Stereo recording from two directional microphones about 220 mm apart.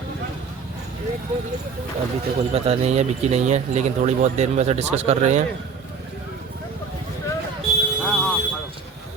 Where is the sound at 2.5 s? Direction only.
30° right (ahead or behind).